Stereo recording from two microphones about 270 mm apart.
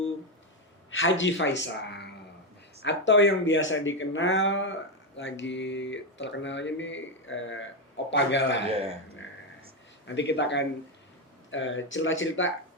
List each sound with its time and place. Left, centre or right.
0.9 s a man's voice: left
10.1 s a man's voice: left